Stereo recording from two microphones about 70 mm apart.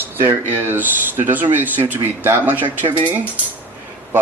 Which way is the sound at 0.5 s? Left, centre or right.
Right.